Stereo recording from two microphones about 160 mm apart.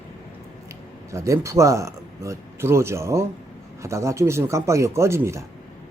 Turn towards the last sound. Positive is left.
turn(degrees=-15)  # may be behind; listen again after turning